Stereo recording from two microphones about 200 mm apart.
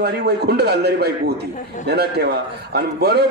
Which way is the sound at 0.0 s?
55° right (ahead or behind).